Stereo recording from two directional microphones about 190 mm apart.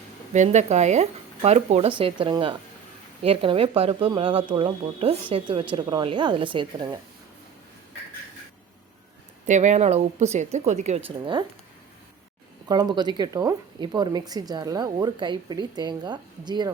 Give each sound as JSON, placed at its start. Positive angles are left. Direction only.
{"t": 0.3, "sound": "a woman's voice", "side_deg": -35}
{"t": 9.5, "sound": "a woman's voice", "side_deg": -40}
{"t": 12.6, "sound": "a woman's voice", "side_deg": -20}